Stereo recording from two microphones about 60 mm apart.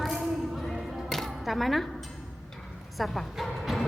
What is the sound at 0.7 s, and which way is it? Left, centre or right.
Music, centre.